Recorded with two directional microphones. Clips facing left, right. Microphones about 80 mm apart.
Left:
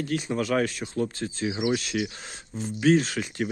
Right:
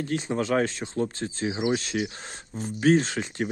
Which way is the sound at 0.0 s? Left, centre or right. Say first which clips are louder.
Even; right.